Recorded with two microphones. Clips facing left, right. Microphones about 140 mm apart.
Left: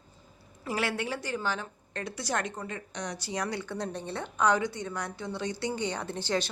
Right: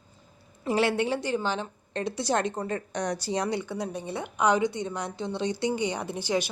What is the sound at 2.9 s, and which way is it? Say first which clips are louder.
Speech: right 7 dB; 50° right (ahead or behind).